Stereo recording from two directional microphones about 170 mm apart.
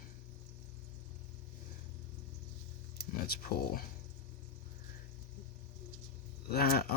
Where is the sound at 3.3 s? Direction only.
60° left (ahead or behind).